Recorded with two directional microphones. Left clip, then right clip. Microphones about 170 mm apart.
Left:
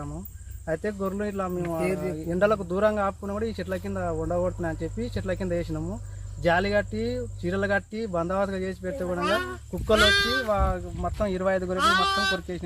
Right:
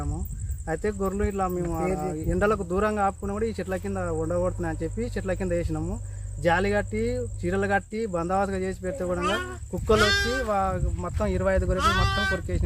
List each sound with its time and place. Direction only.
0.7 s speech: 25° right (ahead or behind)
1.6 s speech: 10° right (ahead or behind)
2.3 s speech: 25° right (ahead or behind)
9.2 s speech: 20° left (ahead or behind)
10.5 s speech: 25° right (ahead or behind)
11.8 s speech: 20° left (ahead or behind)
12.3 s speech: 25° right (ahead or behind)